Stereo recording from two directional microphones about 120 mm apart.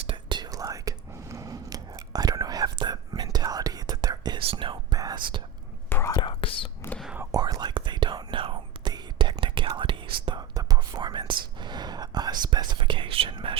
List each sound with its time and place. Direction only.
0.1 s whispering: 40° right (ahead or behind)
4.4 s whispering: 45° right (ahead or behind)
5.9 s whispering: 20° left (ahead or behind)
6.1 s whispering: 45° left (ahead or behind)
7.3 s whispering: 35° right (ahead or behind)
10.5 s whispering: 30° right (ahead or behind); by 13.6 s 45° right (ahead or behind)